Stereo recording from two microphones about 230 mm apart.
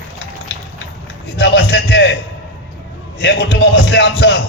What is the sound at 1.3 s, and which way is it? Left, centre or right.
Speech, left.